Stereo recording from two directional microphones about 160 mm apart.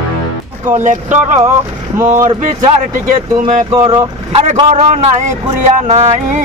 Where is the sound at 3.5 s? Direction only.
50° right (ahead or behind).